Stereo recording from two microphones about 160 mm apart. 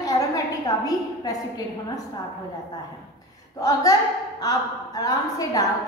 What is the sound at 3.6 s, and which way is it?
A woman's voice, 20° left (ahead or behind).